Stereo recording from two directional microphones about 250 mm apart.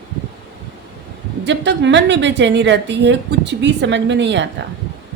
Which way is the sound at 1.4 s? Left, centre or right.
Right.